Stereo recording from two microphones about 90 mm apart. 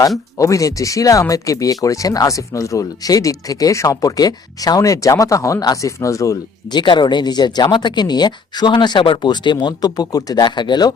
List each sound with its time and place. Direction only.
0.3 s speech: 35° left (ahead or behind)
6.7 s speech: 55° left (ahead or behind)